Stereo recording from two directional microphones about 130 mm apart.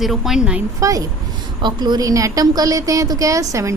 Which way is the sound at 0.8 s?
25° right (ahead or behind).